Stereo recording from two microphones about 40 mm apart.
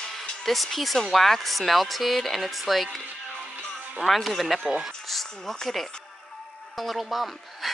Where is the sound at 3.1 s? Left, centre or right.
Right.